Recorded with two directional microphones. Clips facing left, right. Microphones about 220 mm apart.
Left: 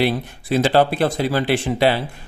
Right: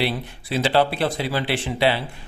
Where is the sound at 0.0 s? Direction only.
45° left (ahead or behind).